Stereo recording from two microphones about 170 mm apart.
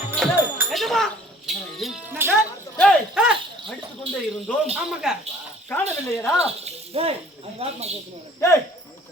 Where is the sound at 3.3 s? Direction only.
30° right (ahead or behind).